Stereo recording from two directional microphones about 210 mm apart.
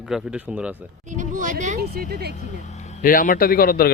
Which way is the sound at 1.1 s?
35° right (ahead or behind).